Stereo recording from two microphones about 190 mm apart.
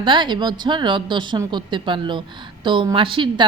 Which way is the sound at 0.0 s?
25° right (ahead or behind).